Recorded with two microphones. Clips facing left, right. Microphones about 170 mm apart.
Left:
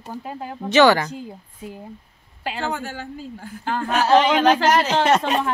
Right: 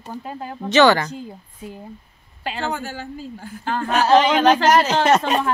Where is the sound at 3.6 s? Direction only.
10° left (ahead or behind).